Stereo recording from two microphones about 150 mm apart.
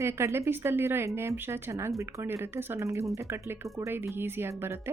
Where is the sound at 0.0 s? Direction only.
20° right (ahead or behind).